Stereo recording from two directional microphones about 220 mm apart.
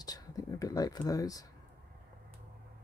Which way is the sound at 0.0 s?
15° left (ahead or behind).